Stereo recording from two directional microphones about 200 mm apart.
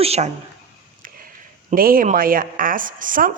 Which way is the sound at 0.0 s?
30° right (ahead or behind).